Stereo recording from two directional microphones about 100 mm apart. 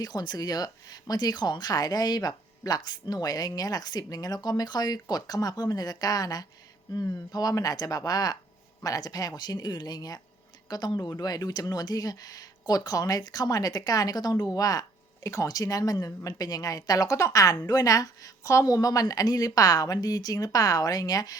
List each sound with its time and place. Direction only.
0.0 s speech: 40° left (ahead or behind)